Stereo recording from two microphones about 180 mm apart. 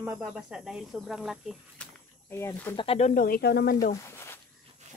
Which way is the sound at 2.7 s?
30° left (ahead or behind).